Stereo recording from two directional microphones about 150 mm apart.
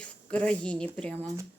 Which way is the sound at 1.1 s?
20° right (ahead or behind).